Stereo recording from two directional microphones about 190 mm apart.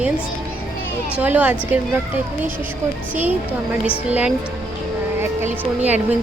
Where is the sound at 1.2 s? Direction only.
10° right (ahead or behind).